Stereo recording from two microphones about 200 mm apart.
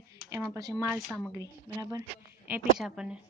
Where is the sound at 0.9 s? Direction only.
Centre (ahead or behind).